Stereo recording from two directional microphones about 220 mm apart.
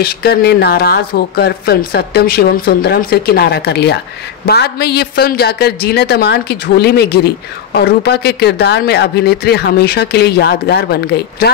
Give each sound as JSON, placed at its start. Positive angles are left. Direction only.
{"t": 0.0, "sound": "a woman's voice", "side_deg": 45}